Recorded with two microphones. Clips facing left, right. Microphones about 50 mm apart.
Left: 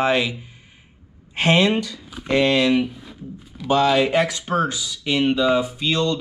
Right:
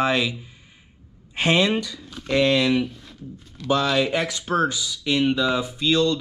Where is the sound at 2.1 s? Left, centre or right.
Centre.